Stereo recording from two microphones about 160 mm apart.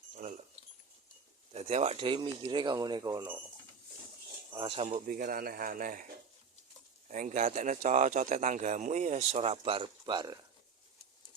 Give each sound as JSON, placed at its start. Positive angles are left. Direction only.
{"t": 0.2, "sound": "a sound", "side_deg": -60}
{"t": 1.5, "sound": "speech", "side_deg": -40}
{"t": 4.5, "sound": "speech", "side_deg": -35}
{"t": 5.0, "sound": "speech", "side_deg": -55}
{"t": 7.1, "sound": "speech", "side_deg": -50}